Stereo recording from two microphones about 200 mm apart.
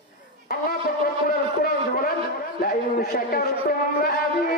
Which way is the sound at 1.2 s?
50° left (ahead or behind).